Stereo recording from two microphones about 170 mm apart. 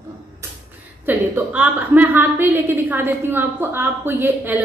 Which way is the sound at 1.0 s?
10° right (ahead or behind).